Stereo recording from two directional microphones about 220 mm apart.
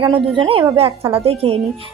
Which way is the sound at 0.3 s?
25° right (ahead or behind).